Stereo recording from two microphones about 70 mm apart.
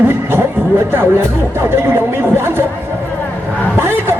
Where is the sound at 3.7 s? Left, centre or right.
Right.